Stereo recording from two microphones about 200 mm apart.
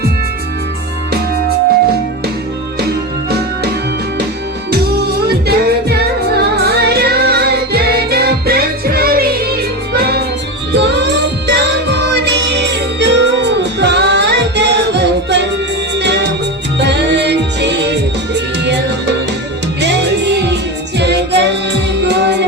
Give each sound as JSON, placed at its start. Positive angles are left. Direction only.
{"t": 2.8, "sound": "music", "side_deg": -50}
{"t": 4.7, "sound": "music", "side_deg": -55}